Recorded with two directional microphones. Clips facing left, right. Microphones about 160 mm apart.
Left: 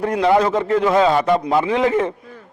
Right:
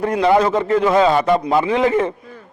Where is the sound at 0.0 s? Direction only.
15° right (ahead or behind).